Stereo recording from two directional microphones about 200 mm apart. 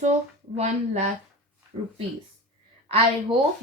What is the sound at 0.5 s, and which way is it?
Speech, 35° right (ahead or behind).